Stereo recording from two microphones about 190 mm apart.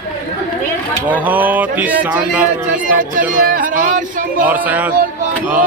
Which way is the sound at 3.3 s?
45° right (ahead or behind).